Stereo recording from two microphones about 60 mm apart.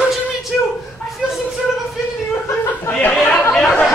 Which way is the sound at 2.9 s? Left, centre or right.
Left.